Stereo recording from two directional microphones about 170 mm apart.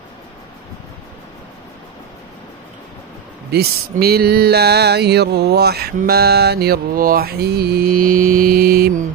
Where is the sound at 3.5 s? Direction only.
65° right (ahead or behind).